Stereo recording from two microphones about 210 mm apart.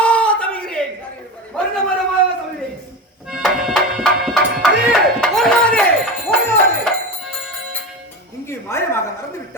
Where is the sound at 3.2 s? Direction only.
Centre (ahead or behind).